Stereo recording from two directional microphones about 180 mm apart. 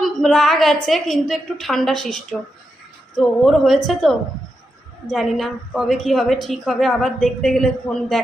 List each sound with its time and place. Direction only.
0.0 s a woman's voice: centre (ahead or behind)